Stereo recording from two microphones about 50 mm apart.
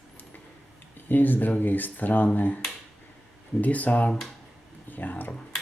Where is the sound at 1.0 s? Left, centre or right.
Left.